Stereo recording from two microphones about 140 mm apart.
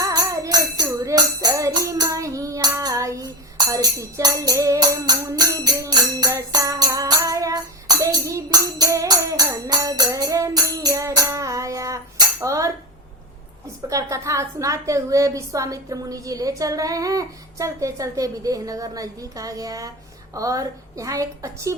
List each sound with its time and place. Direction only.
0.0 s music: 25° right (ahead or behind)
13.9 s a woman's voice: 20° right (ahead or behind)